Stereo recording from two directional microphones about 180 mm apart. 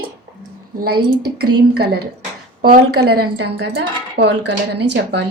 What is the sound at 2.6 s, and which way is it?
A woman's voice, 60° right (ahead or behind).